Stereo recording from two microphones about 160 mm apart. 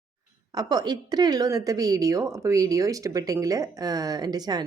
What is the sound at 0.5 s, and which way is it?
A woman's voice, 25° right (ahead or behind).